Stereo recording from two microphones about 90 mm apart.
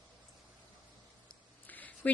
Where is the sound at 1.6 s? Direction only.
20° left (ahead or behind).